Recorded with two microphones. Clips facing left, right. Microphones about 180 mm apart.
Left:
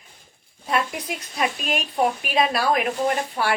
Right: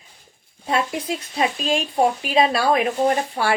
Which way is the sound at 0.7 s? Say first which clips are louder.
Right 3 dB; 25° right (ahead or behind).